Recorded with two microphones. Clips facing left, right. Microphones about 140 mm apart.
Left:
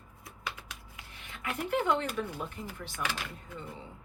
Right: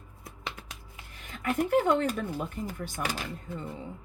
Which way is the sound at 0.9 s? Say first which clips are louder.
Right 3 dB; 40° right (ahead or behind).